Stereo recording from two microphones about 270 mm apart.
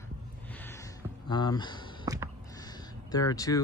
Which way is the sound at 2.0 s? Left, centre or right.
Centre.